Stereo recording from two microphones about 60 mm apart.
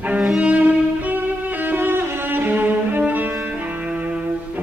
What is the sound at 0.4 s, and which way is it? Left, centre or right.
Music, right.